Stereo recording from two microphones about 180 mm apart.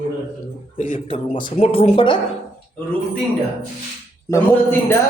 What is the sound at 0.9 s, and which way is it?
Speech, 30° left (ahead or behind).